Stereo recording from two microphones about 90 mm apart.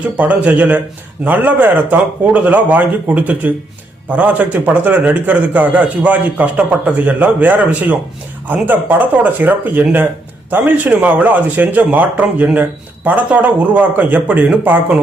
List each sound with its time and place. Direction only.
0.0 s a man's voice: 15° right (ahead or behind)